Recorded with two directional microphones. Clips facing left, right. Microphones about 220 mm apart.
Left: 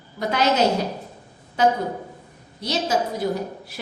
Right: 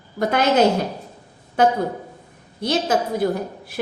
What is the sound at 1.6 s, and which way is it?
A woman's voice, 55° right (ahead or behind).